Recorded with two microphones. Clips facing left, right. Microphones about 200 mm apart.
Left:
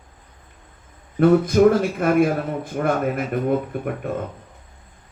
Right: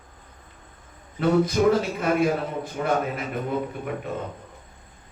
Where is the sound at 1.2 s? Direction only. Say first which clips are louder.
Left 6 dB; 55° left (ahead or behind).